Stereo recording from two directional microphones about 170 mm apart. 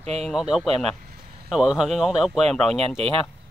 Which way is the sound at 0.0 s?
40° right (ahead or behind).